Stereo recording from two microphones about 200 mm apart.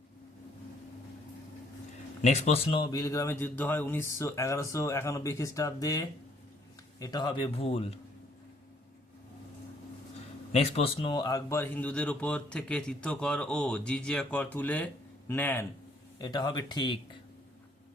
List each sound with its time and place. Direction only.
2.2 s a man's voice: 35° left (ahead or behind)
10.5 s a man's voice: 30° left (ahead or behind)